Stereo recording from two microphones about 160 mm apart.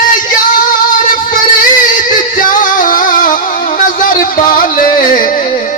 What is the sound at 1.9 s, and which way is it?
Music, 55° left (ahead or behind).